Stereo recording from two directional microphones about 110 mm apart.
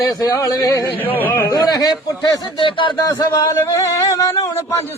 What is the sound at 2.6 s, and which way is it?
Speech, 50° left (ahead or behind).